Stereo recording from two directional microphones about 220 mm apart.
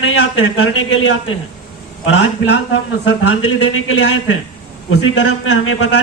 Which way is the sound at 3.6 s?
60° left (ahead or behind).